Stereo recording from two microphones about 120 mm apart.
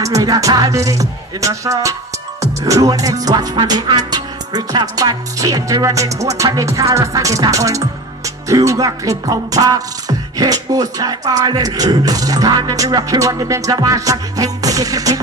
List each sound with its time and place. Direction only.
0.0 s music: 30° right (ahead or behind)